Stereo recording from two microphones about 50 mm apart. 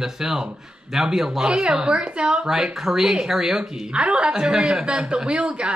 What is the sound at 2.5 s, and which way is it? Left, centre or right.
A woman's voice, centre.